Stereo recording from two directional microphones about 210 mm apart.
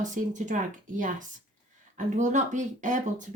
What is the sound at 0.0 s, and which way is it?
Speech, 35° right (ahead or behind).